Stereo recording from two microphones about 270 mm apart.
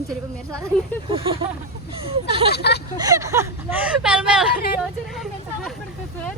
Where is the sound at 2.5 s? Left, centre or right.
Left.